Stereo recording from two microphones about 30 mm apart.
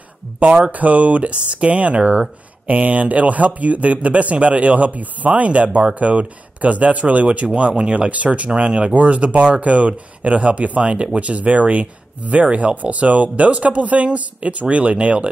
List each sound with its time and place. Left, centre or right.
0.7 s speech: right
8.5 s speech: right
8.9 s speech: right